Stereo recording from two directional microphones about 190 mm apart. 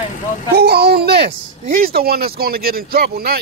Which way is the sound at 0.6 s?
55° right (ahead or behind).